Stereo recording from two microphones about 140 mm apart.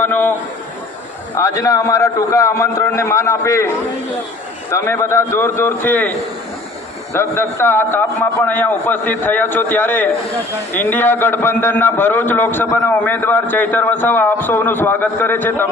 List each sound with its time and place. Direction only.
0.0 s a man's voice: 15° left (ahead or behind)
1.4 s a man's voice: 25° left (ahead or behind)
4.7 s a man's voice: 20° left (ahead or behind)